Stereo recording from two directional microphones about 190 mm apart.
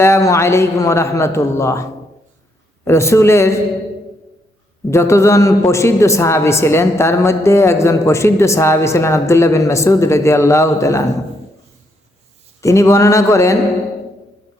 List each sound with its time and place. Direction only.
0.0 s a man's voice: 15° left (ahead or behind)
2.8 s a man's voice: 15° left (ahead or behind)
4.9 s a man's voice: 15° left (ahead or behind)
12.6 s a man's voice: 15° left (ahead or behind)